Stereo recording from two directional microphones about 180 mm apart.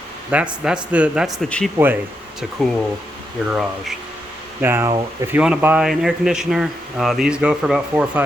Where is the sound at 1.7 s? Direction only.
10° right (ahead or behind).